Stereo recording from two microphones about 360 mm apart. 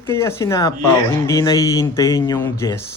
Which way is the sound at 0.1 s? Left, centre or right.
Centre.